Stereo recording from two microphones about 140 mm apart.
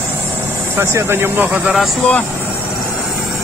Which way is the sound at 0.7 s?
20° right (ahead or behind).